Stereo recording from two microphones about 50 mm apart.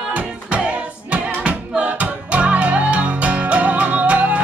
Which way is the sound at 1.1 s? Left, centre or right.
Right.